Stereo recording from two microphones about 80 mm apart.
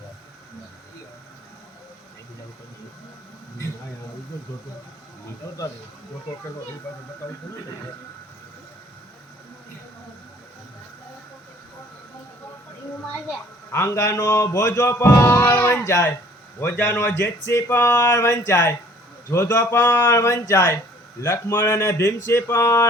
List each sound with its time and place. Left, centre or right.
13.7 s speech: left
16.6 s speech: left
17.7 s a sound: left
17.9 s speech: left